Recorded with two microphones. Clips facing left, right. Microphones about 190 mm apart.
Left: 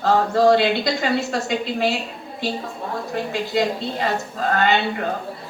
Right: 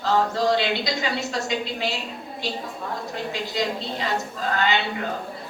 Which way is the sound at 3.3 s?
50° left (ahead or behind).